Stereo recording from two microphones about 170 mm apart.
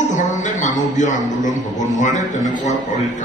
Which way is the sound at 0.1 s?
45° left (ahead or behind).